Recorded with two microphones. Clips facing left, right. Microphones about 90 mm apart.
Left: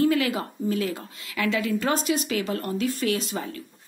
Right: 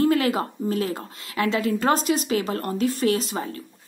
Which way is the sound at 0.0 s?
45° right (ahead or behind).